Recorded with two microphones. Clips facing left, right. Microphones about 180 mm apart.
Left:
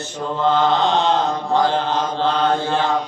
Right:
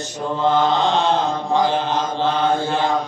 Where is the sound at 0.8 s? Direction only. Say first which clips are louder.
Left 1 dB; 20° left (ahead or behind).